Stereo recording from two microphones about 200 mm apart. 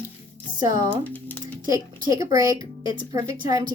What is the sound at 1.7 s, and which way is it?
Speech, 15° right (ahead or behind).